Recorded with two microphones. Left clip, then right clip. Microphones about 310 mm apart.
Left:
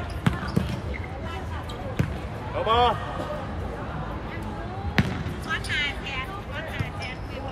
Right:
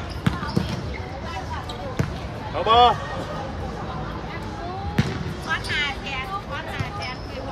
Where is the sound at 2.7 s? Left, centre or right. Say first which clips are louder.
Right 6 dB; right.